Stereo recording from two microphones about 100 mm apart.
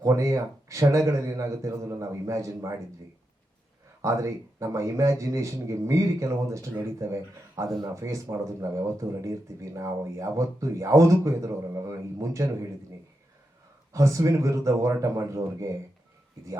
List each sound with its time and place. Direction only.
0.0 s a man's voice: 30° right (ahead or behind)
4.0 s a man's voice: 30° right (ahead or behind)
13.9 s a man's voice: 30° right (ahead or behind)